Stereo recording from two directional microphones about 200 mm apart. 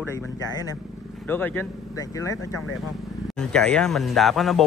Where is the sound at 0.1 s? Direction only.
20° left (ahead or behind).